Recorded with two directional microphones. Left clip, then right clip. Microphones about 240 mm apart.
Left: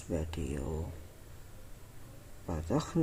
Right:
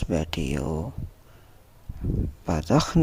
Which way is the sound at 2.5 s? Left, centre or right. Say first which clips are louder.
Right 11 dB; right.